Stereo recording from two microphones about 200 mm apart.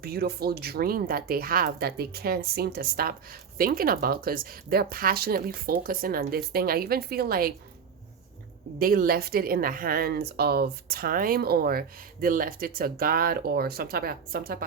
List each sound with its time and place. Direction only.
0.0 s speech: 50° right (ahead or behind)
8.8 s speech: 45° right (ahead or behind)